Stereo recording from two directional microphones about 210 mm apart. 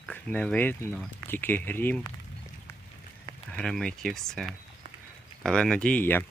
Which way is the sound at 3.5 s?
5° left (ahead or behind).